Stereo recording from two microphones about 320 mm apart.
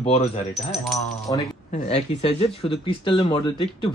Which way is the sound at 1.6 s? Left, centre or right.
Left.